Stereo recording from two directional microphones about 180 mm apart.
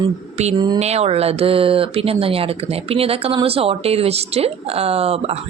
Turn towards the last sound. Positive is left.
turn(degrees=-35)  # may be behind; listen again after turning